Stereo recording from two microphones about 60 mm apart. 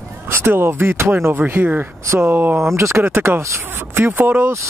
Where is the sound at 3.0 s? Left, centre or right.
Right.